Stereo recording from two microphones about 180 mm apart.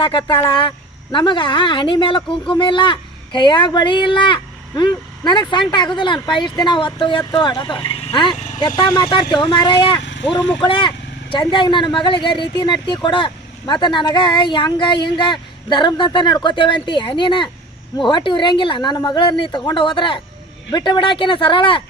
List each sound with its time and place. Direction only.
0.0 s speech: 30° left (ahead or behind)
10.0 s vehicle: 80° left
10.6 s speech: 25° left (ahead or behind)